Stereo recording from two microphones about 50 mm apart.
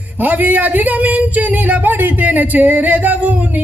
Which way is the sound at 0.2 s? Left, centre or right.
Right.